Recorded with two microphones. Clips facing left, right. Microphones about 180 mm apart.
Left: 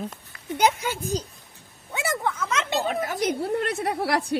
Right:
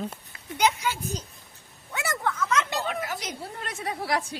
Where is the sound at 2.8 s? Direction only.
50° left (ahead or behind); by 4.4 s 65° left (ahead or behind).